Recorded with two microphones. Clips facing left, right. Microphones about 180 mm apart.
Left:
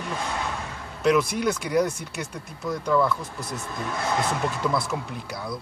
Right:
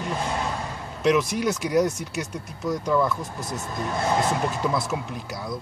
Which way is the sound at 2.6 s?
20° right (ahead or behind).